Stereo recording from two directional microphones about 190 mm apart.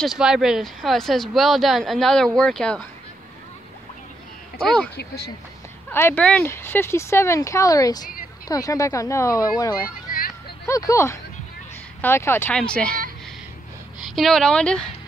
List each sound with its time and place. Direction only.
0.0 s speech: centre (ahead or behind)
4.9 s speech: 55° left (ahead or behind)
5.9 s speech: 10° left (ahead or behind)
14.0 s speech: centre (ahead or behind)